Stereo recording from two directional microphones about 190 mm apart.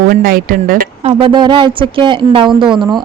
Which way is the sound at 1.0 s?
25° right (ahead or behind).